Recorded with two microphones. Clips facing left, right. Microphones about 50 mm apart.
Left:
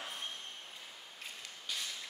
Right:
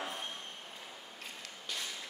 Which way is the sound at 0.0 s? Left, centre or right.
Right.